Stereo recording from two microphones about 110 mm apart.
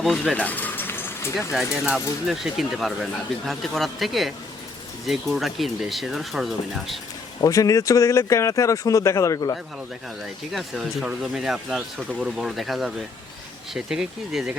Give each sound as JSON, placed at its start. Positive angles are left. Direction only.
{"t": 0.0, "sound": "speech", "side_deg": 0}
{"t": 0.3, "sound": "a sound", "side_deg": 15}
{"t": 1.4, "sound": "speech", "side_deg": -5}
{"t": 7.4, "sound": "speech", "side_deg": 30}
{"t": 10.5, "sound": "speech", "side_deg": 0}